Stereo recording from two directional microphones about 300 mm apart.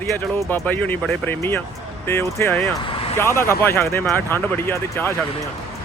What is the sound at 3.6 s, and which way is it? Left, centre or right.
Speech, centre.